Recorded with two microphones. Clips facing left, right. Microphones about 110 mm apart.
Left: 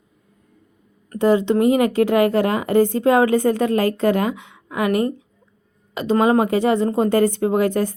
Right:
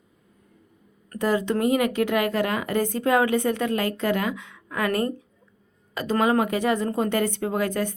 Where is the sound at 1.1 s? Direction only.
25° left (ahead or behind).